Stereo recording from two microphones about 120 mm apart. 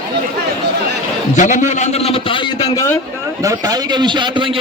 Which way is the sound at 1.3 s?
90° left.